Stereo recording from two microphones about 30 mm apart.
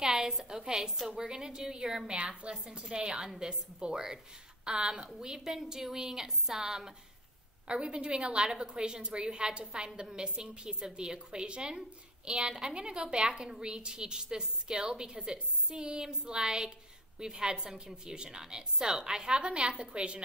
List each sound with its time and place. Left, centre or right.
0.0 s a sound: right
0.5 s a woman's voice: centre
1.2 s a woman's voice: right
7.6 s a woman's voice: right